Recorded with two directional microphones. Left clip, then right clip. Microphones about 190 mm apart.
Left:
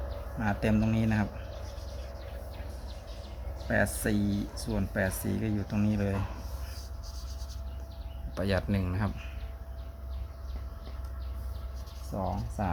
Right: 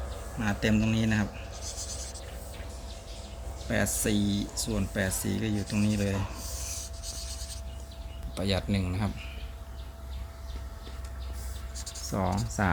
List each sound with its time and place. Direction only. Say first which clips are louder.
0.3 s speech: right 1 dB; centre (ahead or behind)
3.7 s speech: even; 5° left (ahead or behind)
8.4 s speech: even; centre (ahead or behind)
12.1 s speech: right 3 dB; 35° right (ahead or behind)
12.6 s speech: right 5 dB; 20° right (ahead or behind)